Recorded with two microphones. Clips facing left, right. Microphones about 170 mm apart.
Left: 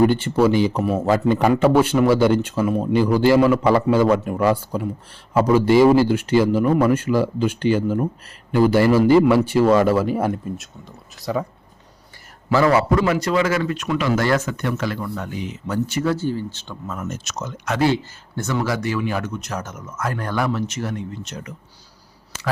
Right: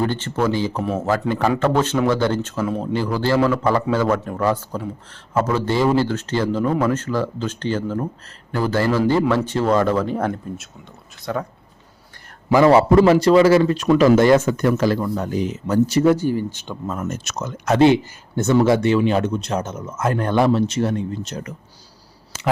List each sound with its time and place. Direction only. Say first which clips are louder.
0.0 s speech: left 5 dB; 15° left (ahead or behind)
12.6 s speech: right 6 dB; 30° right (ahead or behind)
14.2 s speech: right 6 dB; 25° right (ahead or behind)
14.5 s speech: right 6 dB; 40° right (ahead or behind)
16.0 s speech: right 5 dB; 15° right (ahead or behind)
16.8 s speech: right 4 dB; 35° right (ahead or behind)
17.1 s speech: right 2 dB; 55° right (ahead or behind)
17.7 s speech: right 5 dB; 20° right (ahead or behind)